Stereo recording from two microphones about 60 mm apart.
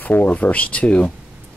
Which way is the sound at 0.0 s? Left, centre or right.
Left.